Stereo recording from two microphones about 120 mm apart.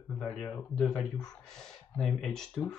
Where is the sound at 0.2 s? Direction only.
10° left (ahead or behind).